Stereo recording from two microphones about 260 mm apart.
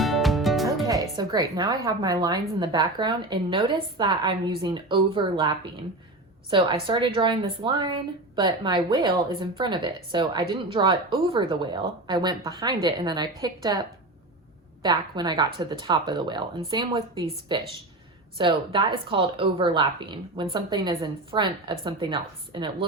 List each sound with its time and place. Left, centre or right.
0.0 s music: centre
0.9 s a woman's voice: centre
14.8 s a woman's voice: centre